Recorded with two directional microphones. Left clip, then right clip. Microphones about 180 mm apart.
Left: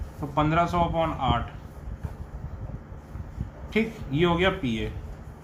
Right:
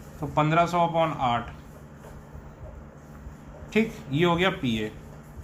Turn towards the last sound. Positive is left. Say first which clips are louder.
# even
turn(degrees=-20)  # may be behind; listen again after turning